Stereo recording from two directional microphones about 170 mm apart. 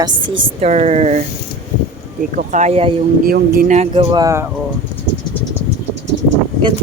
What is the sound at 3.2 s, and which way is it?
Speech, 60° right (ahead or behind).